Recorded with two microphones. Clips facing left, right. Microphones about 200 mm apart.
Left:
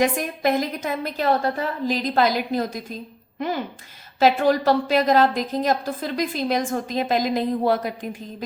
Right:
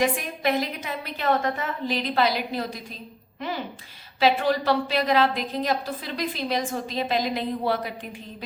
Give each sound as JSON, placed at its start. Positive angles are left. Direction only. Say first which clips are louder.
{"t": 0.0, "sound": "a woman's voice", "louder": "left 3 dB", "side_deg": 45}
{"t": 4.2, "sound": "a woman's voice", "louder": "left 4 dB", "side_deg": 45}